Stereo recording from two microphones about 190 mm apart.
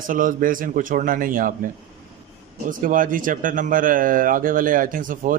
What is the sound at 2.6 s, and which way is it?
Speech, 45° right (ahead or behind).